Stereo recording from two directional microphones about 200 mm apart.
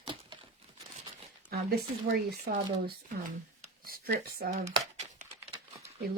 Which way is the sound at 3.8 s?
50° right (ahead or behind).